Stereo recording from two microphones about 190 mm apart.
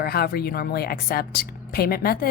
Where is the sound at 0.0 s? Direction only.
55° left (ahead or behind).